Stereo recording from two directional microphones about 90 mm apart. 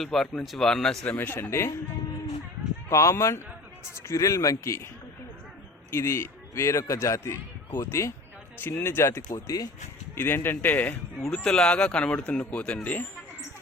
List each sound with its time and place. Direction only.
0.0 s speech: 5° left (ahead or behind)
1.0 s speech: 20° left (ahead or behind)
2.9 s speech: 35° left (ahead or behind)
5.9 s a man's voice: 30° left (ahead or behind)
10.2 s speech: 25° left (ahead or behind)
11.3 s speech: 10° left (ahead or behind)